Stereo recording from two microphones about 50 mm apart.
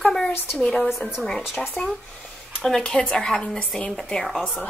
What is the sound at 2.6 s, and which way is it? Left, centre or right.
Speech, centre.